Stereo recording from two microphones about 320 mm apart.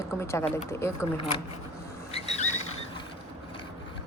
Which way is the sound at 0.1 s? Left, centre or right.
Centre.